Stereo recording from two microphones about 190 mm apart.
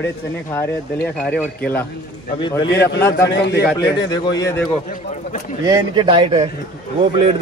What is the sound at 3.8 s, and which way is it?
Speech, 20° left (ahead or behind).